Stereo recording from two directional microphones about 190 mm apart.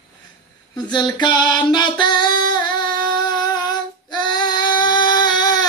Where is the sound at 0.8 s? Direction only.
20° left (ahead or behind).